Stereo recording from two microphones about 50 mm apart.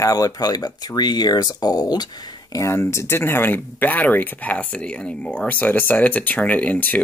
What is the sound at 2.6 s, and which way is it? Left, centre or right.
Speech, left.